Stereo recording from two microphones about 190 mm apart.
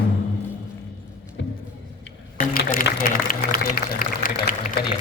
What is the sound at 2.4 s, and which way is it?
Speech, 45° left (ahead or behind).